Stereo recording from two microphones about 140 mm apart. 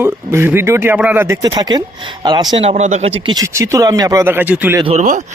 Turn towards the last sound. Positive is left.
turn(degrees=-65)  # may be behind; listen again after turning